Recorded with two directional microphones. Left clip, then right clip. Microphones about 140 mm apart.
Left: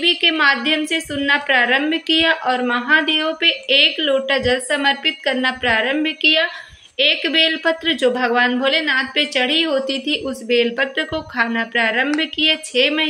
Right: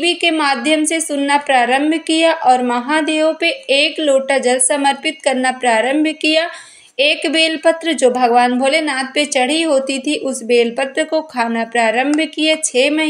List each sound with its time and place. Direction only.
0.0 s a woman's voice: 25° right (ahead or behind)